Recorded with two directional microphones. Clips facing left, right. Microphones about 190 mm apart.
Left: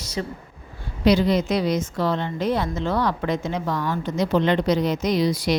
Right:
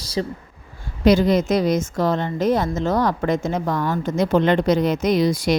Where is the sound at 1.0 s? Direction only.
50° right (ahead or behind).